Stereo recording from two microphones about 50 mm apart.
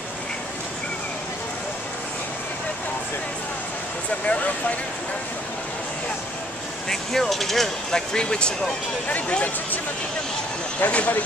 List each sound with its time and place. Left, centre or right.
4.3 s speech: left
6.9 s speech: centre
10.8 s speech: left